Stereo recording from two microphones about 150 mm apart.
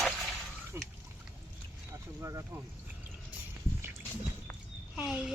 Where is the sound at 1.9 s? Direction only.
20° right (ahead or behind).